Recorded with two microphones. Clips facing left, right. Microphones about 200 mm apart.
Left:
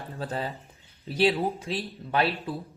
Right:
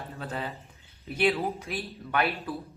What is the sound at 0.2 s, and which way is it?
Speech, 35° left (ahead or behind).